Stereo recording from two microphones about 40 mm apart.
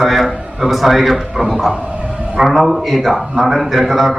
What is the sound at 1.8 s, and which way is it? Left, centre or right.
Bow-wow, right.